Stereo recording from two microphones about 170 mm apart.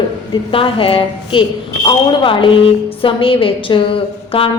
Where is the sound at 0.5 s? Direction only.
30° left (ahead or behind).